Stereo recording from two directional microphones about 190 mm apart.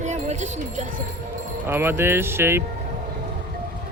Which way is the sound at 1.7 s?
10° right (ahead or behind).